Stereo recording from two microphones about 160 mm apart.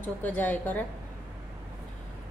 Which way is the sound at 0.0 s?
10° left (ahead or behind).